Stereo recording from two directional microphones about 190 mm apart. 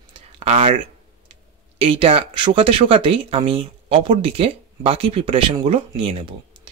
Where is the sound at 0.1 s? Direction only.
30° right (ahead or behind).